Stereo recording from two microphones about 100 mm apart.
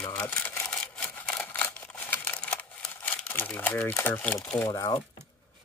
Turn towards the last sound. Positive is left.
turn(degrees=35)  # may be behind; listen again after turning